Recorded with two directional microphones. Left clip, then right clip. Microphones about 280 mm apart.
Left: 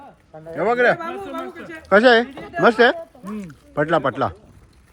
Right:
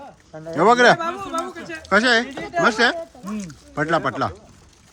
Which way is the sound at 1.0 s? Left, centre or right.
Right.